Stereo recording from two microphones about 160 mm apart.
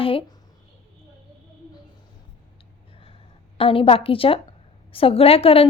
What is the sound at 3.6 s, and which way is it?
A woman's voice, 35° left (ahead or behind).